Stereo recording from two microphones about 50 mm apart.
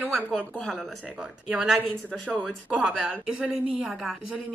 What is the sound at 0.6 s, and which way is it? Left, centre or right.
Speech, centre.